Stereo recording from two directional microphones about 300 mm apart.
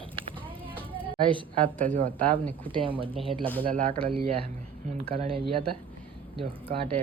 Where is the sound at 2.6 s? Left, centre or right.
Centre.